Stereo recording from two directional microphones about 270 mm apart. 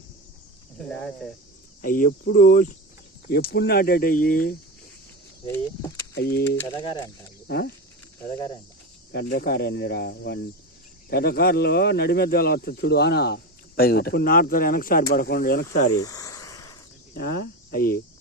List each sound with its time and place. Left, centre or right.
1.8 s speech: left
6.1 s speech: left
6.6 s speech: centre
7.4 s speech: left
9.1 s speech: left
16.0 s a sound: centre
17.2 s speech: left
17.7 s cricket: left